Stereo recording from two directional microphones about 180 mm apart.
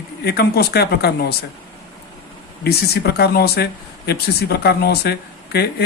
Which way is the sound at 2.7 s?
60° left (ahead or behind).